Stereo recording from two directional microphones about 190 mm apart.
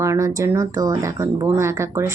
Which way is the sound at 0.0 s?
15° right (ahead or behind).